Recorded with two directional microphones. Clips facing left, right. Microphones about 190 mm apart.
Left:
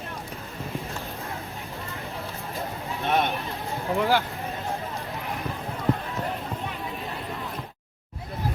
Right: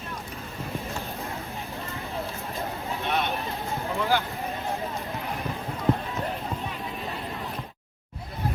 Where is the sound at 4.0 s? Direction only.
55° left (ahead or behind).